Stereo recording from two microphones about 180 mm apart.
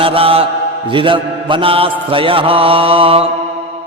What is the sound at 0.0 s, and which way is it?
Mantra, 30° right (ahead or behind).